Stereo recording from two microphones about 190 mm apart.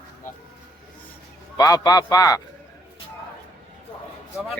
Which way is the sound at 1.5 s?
20° left (ahead or behind).